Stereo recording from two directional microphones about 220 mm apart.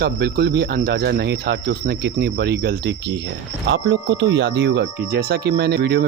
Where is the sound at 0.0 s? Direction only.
45° right (ahead or behind).